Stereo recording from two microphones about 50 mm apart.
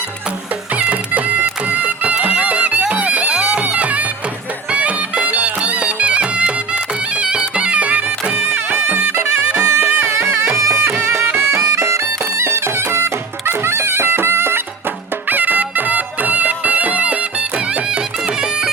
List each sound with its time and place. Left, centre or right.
0.8 s bagpipes: right
1.7 s music: right
7.2 s bagpipes: right
8.5 s music: right
10.8 s music: right
15.3 s music: right